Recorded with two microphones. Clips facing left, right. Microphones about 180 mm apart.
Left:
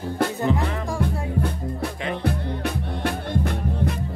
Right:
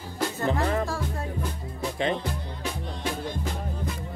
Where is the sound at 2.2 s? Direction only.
60° left (ahead or behind).